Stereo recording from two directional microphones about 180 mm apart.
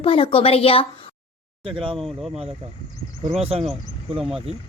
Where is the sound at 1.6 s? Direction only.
30° right (ahead or behind).